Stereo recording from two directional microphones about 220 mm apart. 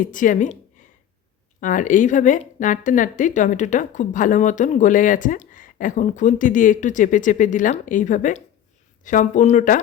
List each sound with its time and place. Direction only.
0.0 s a woman's voice: 35° left (ahead or behind)